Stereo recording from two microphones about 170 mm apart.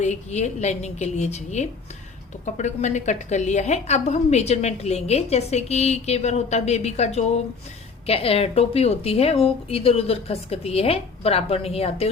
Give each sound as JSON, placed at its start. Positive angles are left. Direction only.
{"t": 0.0, "sound": "a woman's voice", "side_deg": 40}